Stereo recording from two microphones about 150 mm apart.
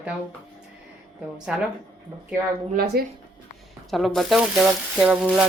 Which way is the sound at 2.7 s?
90° right.